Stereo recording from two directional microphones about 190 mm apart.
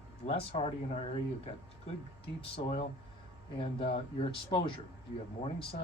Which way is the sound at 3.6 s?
30° left (ahead or behind).